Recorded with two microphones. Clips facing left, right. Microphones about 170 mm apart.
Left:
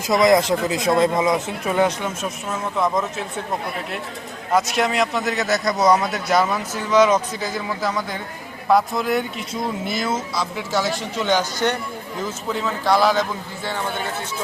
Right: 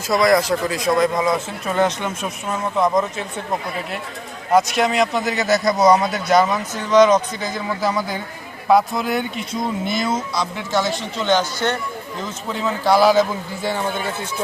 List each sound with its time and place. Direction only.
0.1 s a man's voice: 20° left (ahead or behind); by 3.2 s centre (ahead or behind)
4.5 s speech: centre (ahead or behind)
12.5 s speech: centre (ahead or behind)